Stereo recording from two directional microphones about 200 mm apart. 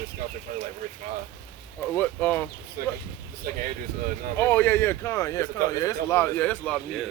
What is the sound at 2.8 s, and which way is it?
Speech, 50° right (ahead or behind).